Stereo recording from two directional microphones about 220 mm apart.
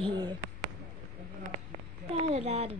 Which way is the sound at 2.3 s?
30° right (ahead or behind).